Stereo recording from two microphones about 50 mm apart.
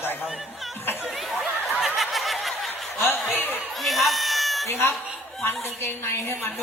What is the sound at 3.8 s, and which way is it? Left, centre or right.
Cat, centre.